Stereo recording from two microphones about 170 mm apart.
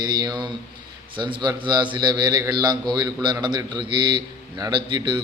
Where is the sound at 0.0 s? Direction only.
25° right (ahead or behind).